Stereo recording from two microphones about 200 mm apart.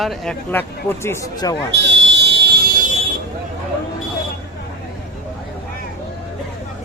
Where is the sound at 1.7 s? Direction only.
60° right (ahead or behind).